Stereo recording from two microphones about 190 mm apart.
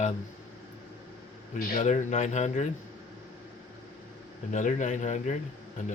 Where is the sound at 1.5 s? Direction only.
50° left (ahead or behind).